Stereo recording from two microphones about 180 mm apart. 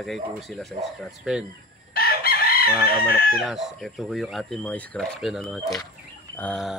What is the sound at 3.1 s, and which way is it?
Speech, 55° left (ahead or behind).